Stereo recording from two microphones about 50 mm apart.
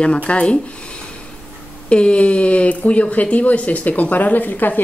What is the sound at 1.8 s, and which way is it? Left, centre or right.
Speech, left.